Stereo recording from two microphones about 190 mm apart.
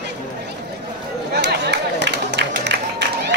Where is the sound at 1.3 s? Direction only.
60° right (ahead or behind).